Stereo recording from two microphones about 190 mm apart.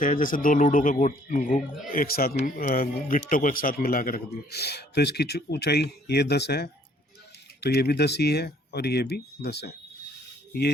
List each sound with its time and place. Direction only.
0.0 s a man's voice: 45° left (ahead or behind); by 9.7 s 60° left (ahead or behind)